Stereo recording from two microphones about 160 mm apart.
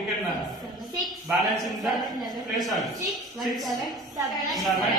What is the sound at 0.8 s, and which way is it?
A woman's voice, centre (ahead or behind).